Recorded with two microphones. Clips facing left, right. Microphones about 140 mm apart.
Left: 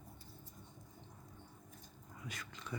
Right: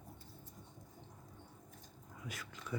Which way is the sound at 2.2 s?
5° right (ahead or behind).